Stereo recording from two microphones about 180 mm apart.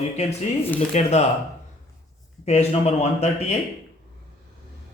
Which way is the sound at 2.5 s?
35° left (ahead or behind).